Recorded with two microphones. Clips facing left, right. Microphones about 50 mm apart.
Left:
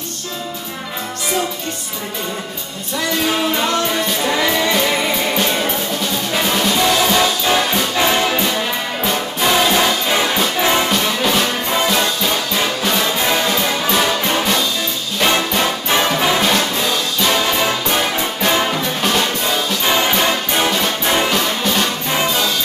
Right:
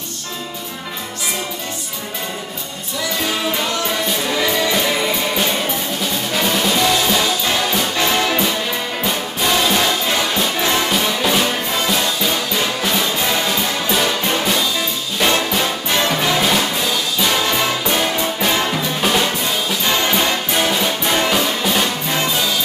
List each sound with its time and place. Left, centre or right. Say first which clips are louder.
4.7 s music: left 1 dB; centre
7.9 s brass instrument: left 2 dB; centre
9.0 s music: left 3 dB; centre
10.9 s music: left 1 dB; centre
15.2 s music: left 1 dB; centre
16.3 s music: left 1 dB; centre
18.9 s music: right 1 dB; centre
19.8 s music: left 1 dB; centre
21.3 s music: even; centre